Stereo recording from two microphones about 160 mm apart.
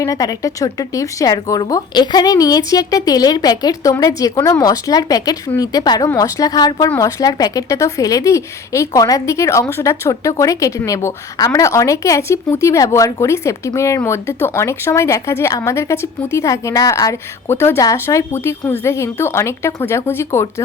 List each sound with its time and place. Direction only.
0.0 s speech: 20° left (ahead or behind)